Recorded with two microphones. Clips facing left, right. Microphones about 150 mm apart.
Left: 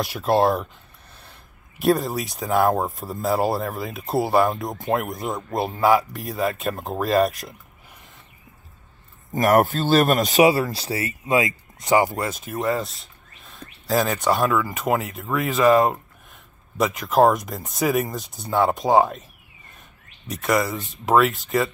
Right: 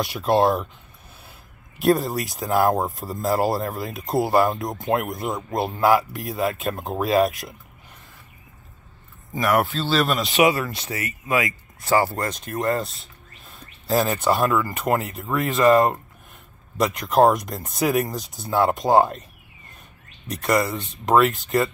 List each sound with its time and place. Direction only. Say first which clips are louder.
0.0 s speech: even; centre (ahead or behind)
1.8 s speech: right 1 dB; centre (ahead or behind)
9.3 s speech: left 4 dB; 45° left (ahead or behind)
10.4 s speech: left 1 dB; 30° left (ahead or behind); by 12.3 s 15° left (ahead or behind)
12.3 s speech: even; 5° left (ahead or behind)
20.2 s speech: even; centre (ahead or behind)